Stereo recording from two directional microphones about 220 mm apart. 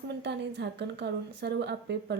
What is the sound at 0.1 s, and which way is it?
A woman's voice, 50° right (ahead or behind).